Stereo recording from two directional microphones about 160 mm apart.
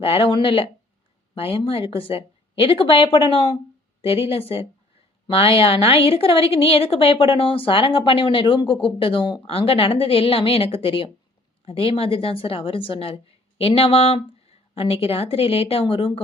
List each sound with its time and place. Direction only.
0.0 s a woman's voice: 35° left (ahead or behind)